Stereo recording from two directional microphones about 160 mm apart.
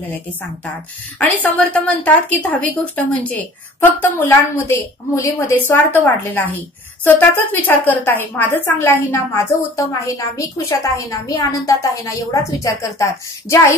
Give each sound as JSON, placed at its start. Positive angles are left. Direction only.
{"t": 1.2, "sound": "a woman's voice", "side_deg": 10}